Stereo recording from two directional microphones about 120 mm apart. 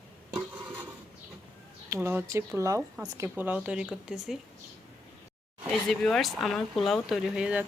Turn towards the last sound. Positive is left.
turn(degrees=-5)  # may be behind; listen again after turning